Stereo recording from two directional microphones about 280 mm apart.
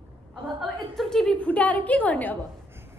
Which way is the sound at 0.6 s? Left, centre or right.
Centre.